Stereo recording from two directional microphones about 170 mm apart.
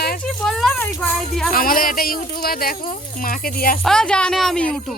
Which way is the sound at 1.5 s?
55° left (ahead or behind).